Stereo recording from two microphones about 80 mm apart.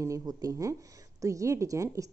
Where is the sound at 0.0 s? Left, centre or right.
Right.